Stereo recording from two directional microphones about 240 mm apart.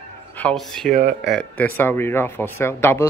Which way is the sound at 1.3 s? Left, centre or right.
Centre.